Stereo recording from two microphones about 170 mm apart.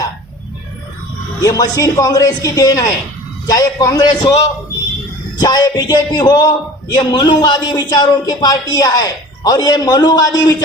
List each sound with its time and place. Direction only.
1.4 s speech: 20° left (ahead or behind)
5.4 s speech: 25° left (ahead or behind)